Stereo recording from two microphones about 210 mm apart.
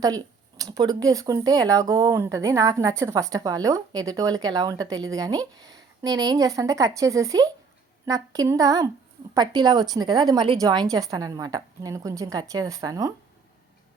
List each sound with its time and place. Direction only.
0.6 s speech: 20° right (ahead or behind)